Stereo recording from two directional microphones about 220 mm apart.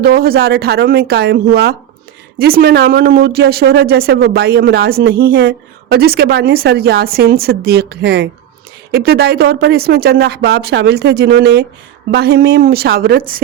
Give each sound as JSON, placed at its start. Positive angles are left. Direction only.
{"t": 0.0, "sound": "speech", "side_deg": -45}